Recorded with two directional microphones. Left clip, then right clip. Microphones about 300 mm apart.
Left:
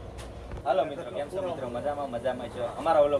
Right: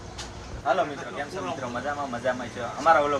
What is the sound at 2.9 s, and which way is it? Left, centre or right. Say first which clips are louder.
Speech: right 3 dB; right.